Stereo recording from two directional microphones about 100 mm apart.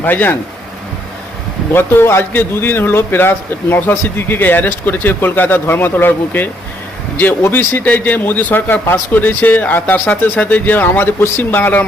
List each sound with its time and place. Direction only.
0.0 s a man's voice: 20° left (ahead or behind)
1.7 s a man's voice: 20° left (ahead or behind)